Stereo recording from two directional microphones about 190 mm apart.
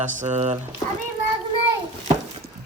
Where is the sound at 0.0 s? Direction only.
40° right (ahead or behind).